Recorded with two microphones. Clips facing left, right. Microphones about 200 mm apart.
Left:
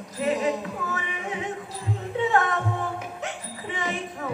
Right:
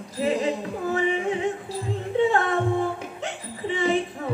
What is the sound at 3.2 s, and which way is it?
Hiccup, 30° right (ahead or behind).